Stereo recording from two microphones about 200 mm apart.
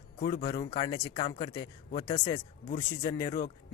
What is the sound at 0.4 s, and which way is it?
Speech, 20° left (ahead or behind).